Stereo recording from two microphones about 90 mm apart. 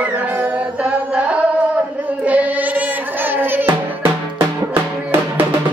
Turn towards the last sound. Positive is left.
turn(degrees=-20)  # may be behind; listen again after turning